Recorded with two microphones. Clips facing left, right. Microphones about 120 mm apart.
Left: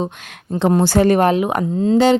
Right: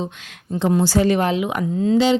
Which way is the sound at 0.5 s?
55° left (ahead or behind).